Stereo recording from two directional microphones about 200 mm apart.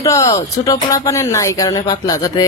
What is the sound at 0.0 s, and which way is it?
Speech, 15° left (ahead or behind).